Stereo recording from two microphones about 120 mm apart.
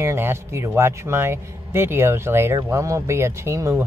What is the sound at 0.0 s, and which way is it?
A man's voice, 20° right (ahead or behind).